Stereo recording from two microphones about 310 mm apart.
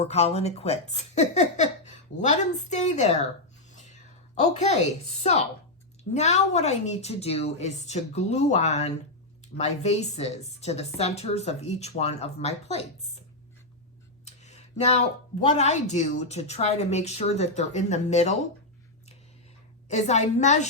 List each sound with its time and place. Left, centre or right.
0.0 s speech: centre
3.7 s a sound: left
6.1 s speech: left
14.3 s a sound: left
15.5 s speech: left
19.9 s speech: left